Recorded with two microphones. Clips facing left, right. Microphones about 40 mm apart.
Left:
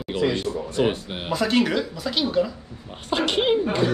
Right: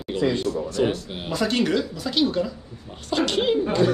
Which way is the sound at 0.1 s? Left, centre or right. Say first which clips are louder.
Right 1 dB; left.